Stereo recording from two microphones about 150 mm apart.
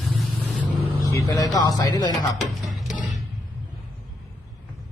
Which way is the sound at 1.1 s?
20° left (ahead or behind).